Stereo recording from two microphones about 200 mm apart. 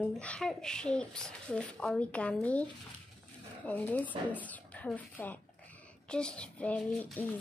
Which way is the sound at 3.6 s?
10° left (ahead or behind).